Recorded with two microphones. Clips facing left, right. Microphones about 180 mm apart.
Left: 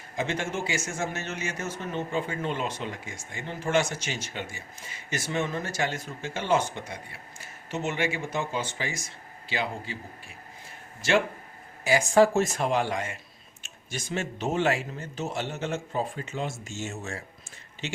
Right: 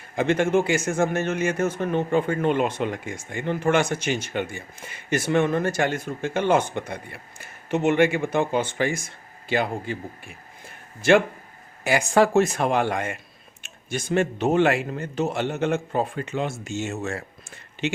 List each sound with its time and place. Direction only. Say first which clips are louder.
0.2 s a man's voice: right 10 dB; 55° right (ahead or behind)